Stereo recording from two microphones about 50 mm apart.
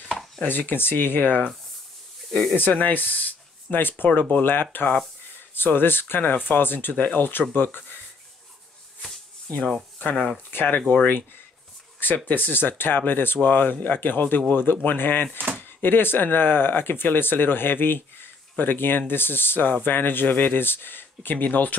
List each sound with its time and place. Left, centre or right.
0.4 s speech: left
2.5 s speech: left
10.1 s speech: left
10.5 s speech: left
12.3 s speech: left